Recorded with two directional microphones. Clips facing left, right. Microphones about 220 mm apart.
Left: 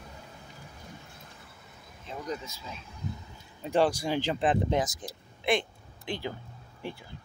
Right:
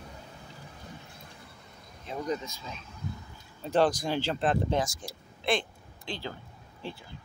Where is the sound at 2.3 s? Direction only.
5° left (ahead or behind).